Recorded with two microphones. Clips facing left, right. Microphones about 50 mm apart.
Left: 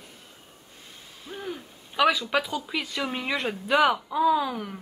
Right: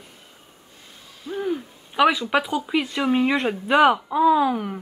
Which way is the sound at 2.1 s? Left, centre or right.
Centre.